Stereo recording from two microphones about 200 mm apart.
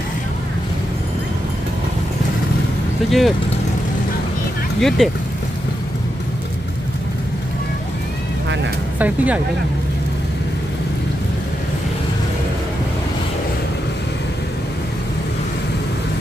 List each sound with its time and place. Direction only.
3.1 s speech: centre (ahead or behind)
4.7 s speech: centre (ahead or behind)
9.0 s speech: 10° right (ahead or behind)